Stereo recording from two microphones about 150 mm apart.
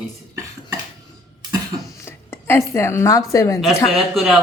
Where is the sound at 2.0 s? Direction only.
15° left (ahead or behind).